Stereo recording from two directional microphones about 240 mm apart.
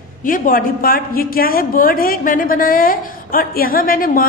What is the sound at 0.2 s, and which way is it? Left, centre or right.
A woman's voice, left.